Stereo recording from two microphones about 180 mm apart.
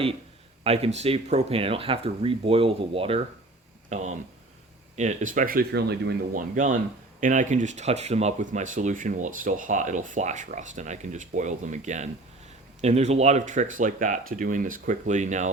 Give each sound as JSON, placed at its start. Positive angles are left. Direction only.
{"t": 0.6, "sound": "speech", "side_deg": -35}
{"t": 6.3, "sound": "speech", "side_deg": -45}